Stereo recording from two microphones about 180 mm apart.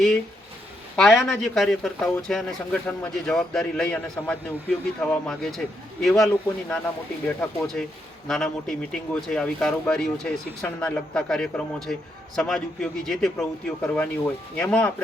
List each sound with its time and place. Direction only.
0.9 s speech: 5° left (ahead or behind)